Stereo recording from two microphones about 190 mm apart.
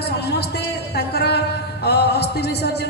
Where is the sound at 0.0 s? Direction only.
60° left (ahead or behind).